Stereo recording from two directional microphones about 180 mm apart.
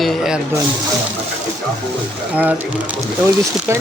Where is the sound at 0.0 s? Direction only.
Centre (ahead or behind).